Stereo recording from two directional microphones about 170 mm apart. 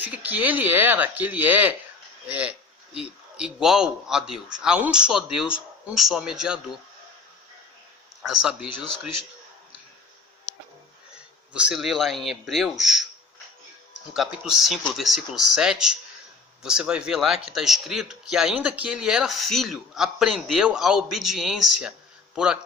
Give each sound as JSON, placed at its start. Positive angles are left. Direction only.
{"t": 0.0, "sound": "a man's voice", "side_deg": -10}
{"t": 8.2, "sound": "a man's voice", "side_deg": -5}
{"t": 8.7, "sound": "speech", "side_deg": 30}
{"t": 11.5, "sound": "a man's voice", "side_deg": -5}
{"t": 14.1, "sound": "a man's voice", "side_deg": -5}